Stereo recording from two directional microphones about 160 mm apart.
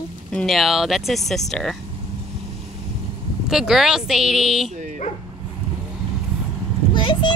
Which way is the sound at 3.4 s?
5° right (ahead or behind).